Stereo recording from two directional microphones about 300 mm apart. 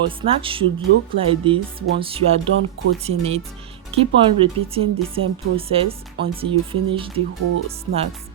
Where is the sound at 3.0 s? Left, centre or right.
Centre.